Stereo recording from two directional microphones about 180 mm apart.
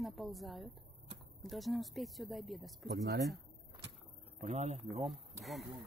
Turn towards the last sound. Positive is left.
turn(degrees=0)  # may be behind; listen again after turning